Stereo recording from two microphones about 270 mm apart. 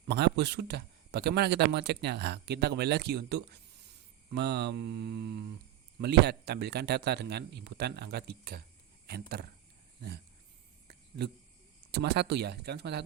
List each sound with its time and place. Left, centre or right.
0.1 s speech: right
11.9 s speech: right